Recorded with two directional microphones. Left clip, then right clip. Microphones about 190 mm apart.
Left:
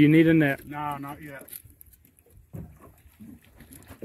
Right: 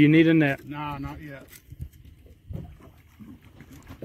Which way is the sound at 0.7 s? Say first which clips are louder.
Left 2 dB; 25° right (ahead or behind).